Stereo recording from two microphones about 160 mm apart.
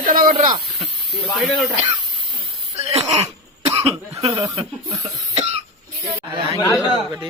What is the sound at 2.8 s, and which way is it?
Throat clearing, 40° right (ahead or behind).